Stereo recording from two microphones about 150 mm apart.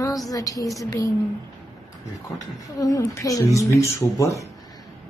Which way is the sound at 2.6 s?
25° left (ahead or behind).